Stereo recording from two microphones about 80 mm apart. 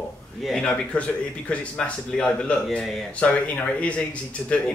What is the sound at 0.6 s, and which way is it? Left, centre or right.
Speech, centre.